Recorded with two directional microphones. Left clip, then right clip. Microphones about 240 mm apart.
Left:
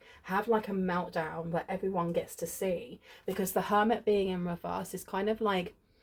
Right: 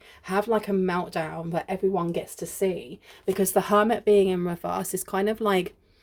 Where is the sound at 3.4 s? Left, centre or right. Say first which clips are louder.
Right 7 dB; right.